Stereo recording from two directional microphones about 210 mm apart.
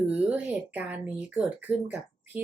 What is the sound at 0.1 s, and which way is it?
Speech, 5° right (ahead or behind).